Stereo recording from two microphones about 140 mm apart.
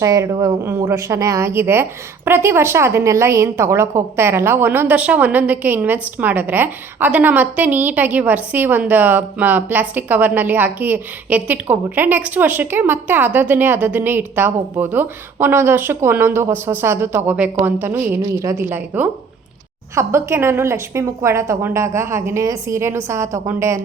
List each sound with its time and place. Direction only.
0.0 s a woman's voice: 20° right (ahead or behind)